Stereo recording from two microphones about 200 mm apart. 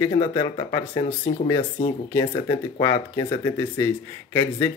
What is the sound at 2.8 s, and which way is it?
Speech, 15° left (ahead or behind).